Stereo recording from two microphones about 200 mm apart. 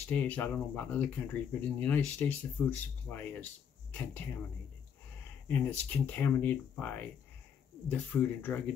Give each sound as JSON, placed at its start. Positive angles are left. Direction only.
{"t": 0.1, "sound": "speech", "side_deg": 5}
{"t": 5.5, "sound": "speech", "side_deg": 10}